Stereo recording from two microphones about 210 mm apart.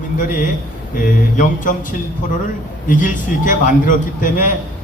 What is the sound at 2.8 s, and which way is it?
A man's voice, 40° left (ahead or behind).